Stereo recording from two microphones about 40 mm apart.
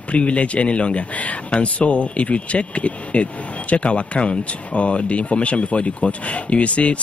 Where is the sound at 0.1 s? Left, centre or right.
Left.